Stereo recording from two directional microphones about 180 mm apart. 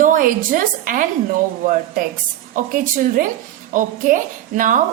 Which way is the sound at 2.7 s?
50° right (ahead or behind).